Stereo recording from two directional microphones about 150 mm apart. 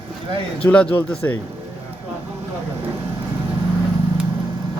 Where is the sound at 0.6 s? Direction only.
10° left (ahead or behind).